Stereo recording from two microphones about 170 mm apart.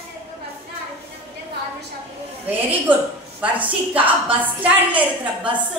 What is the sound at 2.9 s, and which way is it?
A woman's voice, 10° right (ahead or behind).